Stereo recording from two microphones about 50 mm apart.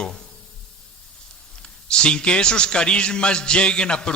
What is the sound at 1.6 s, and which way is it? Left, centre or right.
A man's voice, centre.